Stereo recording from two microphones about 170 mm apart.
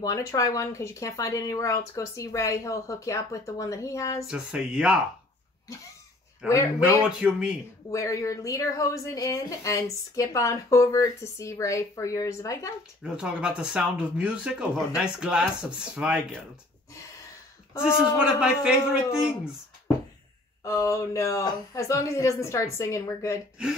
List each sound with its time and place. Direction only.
0.0 s a woman's voice: 20° left (ahead or behind)
4.3 s speech: 5° right (ahead or behind)
6.4 s speech: 5° right (ahead or behind)
7.9 s a woman's voice: 20° left (ahead or behind)
13.0 s speech: 5° right (ahead or behind)
17.8 s speech: 5° right (ahead or behind)
20.6 s speech: 20° left (ahead or behind)